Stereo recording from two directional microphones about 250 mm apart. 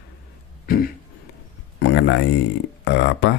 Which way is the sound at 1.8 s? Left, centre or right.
Left.